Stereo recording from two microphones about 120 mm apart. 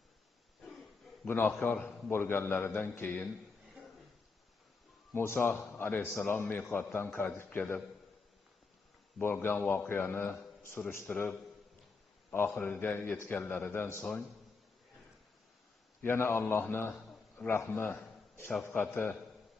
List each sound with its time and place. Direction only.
1.2 s a man's voice: 15° left (ahead or behind)
5.1 s a man's voice: 20° left (ahead or behind)
9.2 s a man's voice: 20° left (ahead or behind)
16.0 s a man's voice: 20° left (ahead or behind)